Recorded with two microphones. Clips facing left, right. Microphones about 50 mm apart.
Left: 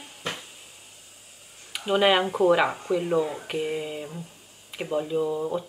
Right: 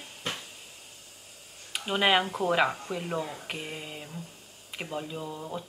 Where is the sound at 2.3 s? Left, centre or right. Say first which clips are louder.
Left 5 dB; left.